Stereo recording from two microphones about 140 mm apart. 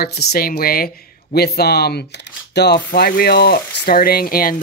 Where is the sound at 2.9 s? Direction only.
90° left.